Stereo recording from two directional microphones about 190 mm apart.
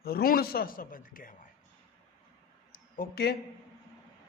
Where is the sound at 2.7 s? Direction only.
55° left (ahead or behind).